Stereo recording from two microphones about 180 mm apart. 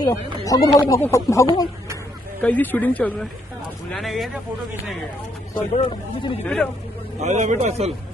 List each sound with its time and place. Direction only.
0.0 s speech: 20° left (ahead or behind); by 4.3 s centre (ahead or behind)
5.8 s speech: 30° left (ahead or behind)
6.4 s speech: 5° left (ahead or behind)
7.2 s speech: 40° right (ahead or behind)